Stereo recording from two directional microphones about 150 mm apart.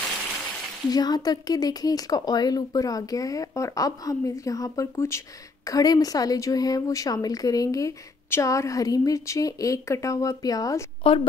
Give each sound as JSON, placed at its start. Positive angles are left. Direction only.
{"t": 0.8, "sound": "a woman's voice", "side_deg": 25}
{"t": 11.0, "sound": "a woman's voice", "side_deg": 35}